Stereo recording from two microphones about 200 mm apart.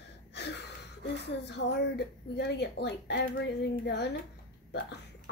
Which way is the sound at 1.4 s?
60° left (ahead or behind).